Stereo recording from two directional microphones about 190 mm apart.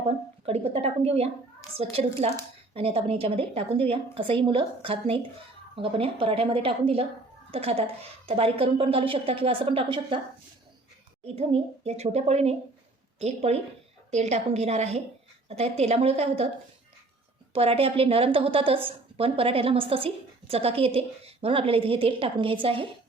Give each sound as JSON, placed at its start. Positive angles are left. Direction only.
{"t": 0.4, "sound": "a sound", "side_deg": -30}
{"t": 1.7, "sound": "a woman's voice", "side_deg": -30}
{"t": 11.3, "sound": "a woman's voice", "side_deg": -35}
{"t": 17.5, "sound": "a woman's voice", "side_deg": -30}